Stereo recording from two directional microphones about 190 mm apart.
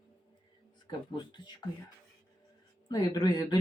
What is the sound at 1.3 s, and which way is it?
Speech, 25° left (ahead or behind).